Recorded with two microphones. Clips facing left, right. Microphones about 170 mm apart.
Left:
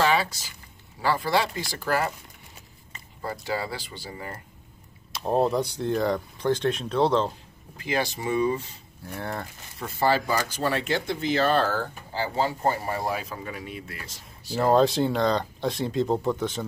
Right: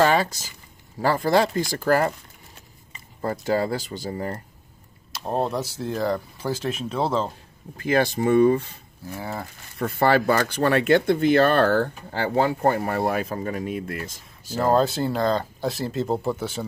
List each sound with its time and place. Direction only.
0.0 s a sound: 45° right (ahead or behind)
0.9 s speech: 45° right (ahead or behind)
3.2 s speech: 45° right (ahead or behind)
5.1 s speech: centre (ahead or behind)
7.7 s speech: 50° right (ahead or behind)
9.0 s speech: 5° right (ahead or behind)
9.8 s speech: 60° right (ahead or behind)
14.6 s speech: centre (ahead or behind)